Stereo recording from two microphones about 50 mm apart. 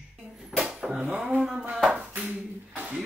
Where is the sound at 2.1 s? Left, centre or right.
Right.